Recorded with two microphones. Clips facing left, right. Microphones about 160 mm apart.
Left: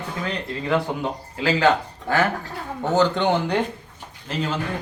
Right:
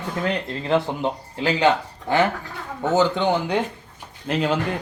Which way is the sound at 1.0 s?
20° right (ahead or behind).